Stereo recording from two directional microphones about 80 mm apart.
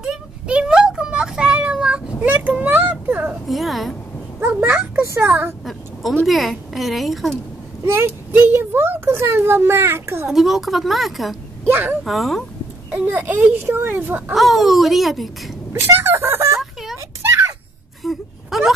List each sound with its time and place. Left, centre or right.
0.0 s a sound: centre
3.4 s a woman's voice: centre
4.6 s a sound: right
6.2 s a child's voice: centre
7.8 s a child's voice: right
10.2 s a child's voice: centre
11.6 s speech: right
12.0 s a child's voice: centre
13.0 s a child's voice: right
14.3 s a child's voice: centre
15.7 s speech: right
17.2 s a sound: right
18.0 s wail: centre